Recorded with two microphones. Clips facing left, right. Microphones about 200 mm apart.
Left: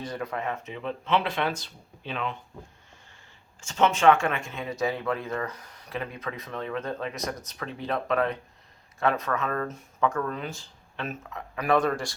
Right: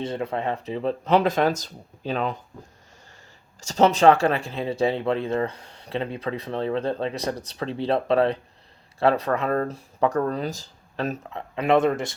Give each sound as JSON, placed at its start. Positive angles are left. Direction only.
{"t": 0.0, "sound": "speech", "side_deg": -25}
{"t": 3.6, "sound": "speech", "side_deg": -40}